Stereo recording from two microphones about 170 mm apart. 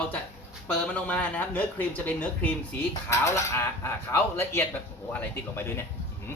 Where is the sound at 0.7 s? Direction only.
5° left (ahead or behind).